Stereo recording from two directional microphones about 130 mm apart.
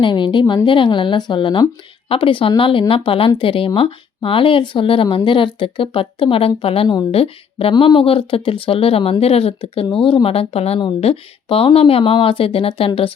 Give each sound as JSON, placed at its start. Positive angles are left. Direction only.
{"t": 0.0, "sound": "speech", "side_deg": 40}